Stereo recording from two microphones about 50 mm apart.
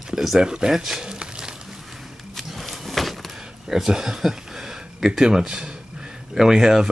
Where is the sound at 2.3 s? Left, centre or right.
Centre.